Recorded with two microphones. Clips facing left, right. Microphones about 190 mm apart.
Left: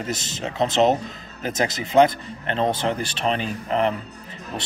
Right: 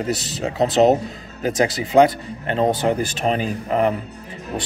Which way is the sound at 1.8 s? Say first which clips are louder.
Right 1 dB; 10° right (ahead or behind).